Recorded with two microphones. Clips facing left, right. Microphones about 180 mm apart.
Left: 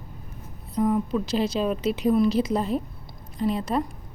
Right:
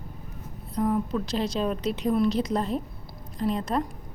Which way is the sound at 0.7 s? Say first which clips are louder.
Left 2 dB; centre (ahead or behind).